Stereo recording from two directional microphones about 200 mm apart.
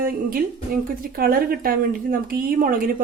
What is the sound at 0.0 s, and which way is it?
Speech, 45° right (ahead or behind).